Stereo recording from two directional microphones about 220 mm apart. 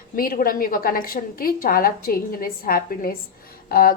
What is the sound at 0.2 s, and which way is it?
A woman's voice, 40° left (ahead or behind).